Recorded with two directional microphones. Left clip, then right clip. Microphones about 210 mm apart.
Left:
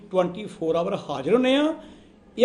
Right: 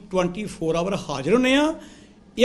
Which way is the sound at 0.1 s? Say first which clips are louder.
Even; 25° right (ahead or behind).